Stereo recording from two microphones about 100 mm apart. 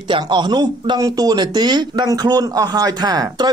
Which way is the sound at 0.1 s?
50° right (ahead or behind).